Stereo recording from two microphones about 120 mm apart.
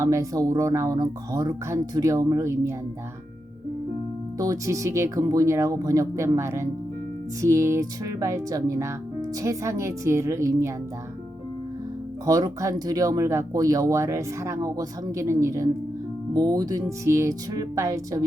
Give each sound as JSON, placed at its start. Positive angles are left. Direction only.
{"t": 0.0, "sound": "speech", "side_deg": -25}
{"t": 4.4, "sound": "speech", "side_deg": -30}
{"t": 12.2, "sound": "speech", "side_deg": -30}